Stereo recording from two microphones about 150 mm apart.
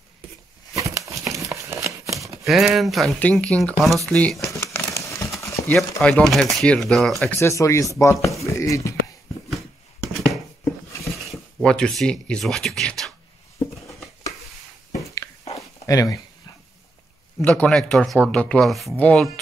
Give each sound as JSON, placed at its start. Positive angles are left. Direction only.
{"t": 0.7, "sound": "a sound", "side_deg": -20}
{"t": 2.4, "sound": "speech", "side_deg": 0}
{"t": 4.4, "sound": "crumpling", "side_deg": 20}
{"t": 5.7, "sound": "speech", "side_deg": 0}
{"t": 7.3, "sound": "speech", "side_deg": 20}
{"t": 11.6, "sound": "speech", "side_deg": 5}
{"t": 15.9, "sound": "speech", "side_deg": 20}
{"t": 17.4, "sound": "speech", "side_deg": 5}